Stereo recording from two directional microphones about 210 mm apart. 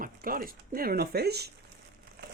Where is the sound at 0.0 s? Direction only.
45° right (ahead or behind).